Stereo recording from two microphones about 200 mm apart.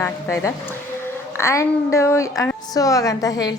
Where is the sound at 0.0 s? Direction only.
15° left (ahead or behind).